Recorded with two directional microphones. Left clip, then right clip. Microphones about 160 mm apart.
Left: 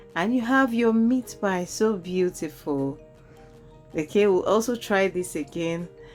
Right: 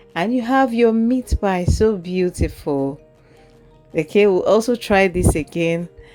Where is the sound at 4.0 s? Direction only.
30° right (ahead or behind).